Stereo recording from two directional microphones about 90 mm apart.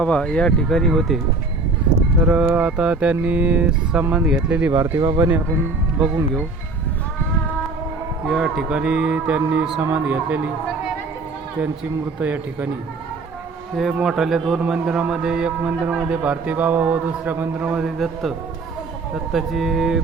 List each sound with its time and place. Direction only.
0.0 s speech: 10° left (ahead or behind)
2.2 s a man's voice: 15° right (ahead or behind)
4.9 s speech: 35° right (ahead or behind)
8.3 s a man's voice: 5° right (ahead or behind)
12.2 s a man's voice: 20° right (ahead or behind)
13.7 s a man's voice: 5° right (ahead or behind)